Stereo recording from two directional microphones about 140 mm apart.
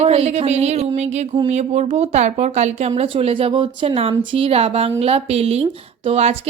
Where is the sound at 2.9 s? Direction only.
45° right (ahead or behind).